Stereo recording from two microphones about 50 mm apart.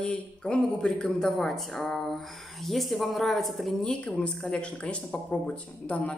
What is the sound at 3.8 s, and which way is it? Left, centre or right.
Speech, left.